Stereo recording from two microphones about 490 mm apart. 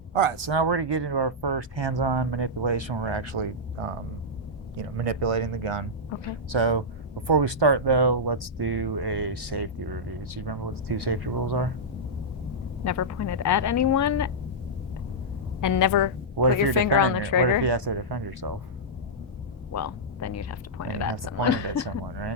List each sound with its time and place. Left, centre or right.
0.1 s speech: right
6.5 s speech: right
12.8 s speech: left
15.6 s speech: left
17.6 s speech: right
19.7 s speech: left